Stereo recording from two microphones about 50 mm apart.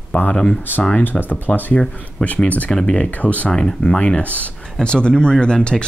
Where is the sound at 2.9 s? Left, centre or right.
Left.